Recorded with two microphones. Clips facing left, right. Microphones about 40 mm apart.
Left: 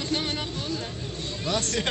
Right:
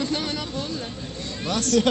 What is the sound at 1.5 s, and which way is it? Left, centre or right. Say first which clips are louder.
Speech: right 7 dB; left.